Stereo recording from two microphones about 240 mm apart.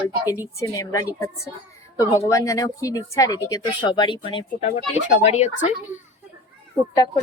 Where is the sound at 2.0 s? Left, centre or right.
Centre; by 5.7 s left.